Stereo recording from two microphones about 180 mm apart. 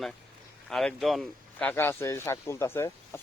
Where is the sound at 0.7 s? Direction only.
Centre (ahead or behind).